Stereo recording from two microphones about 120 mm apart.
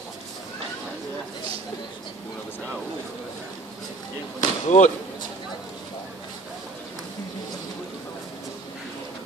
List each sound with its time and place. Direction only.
4.4 s slam: 85° left